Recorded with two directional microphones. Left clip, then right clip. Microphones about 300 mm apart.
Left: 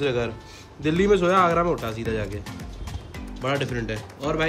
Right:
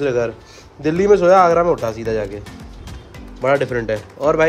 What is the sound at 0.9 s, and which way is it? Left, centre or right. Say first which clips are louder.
Speech: right 8 dB; right.